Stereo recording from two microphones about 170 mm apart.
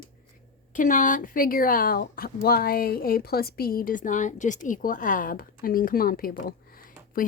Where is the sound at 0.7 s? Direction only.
50° left (ahead or behind).